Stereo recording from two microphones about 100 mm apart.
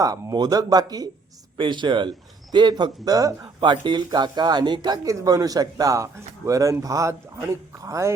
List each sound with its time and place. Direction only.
0.0 s speech: 35° right (ahead or behind)
1.5 s speech: 55° right (ahead or behind); by 3.5 s 35° right (ahead or behind)
3.6 s speech: 50° right (ahead or behind)
5.0 s speech: 35° right (ahead or behind)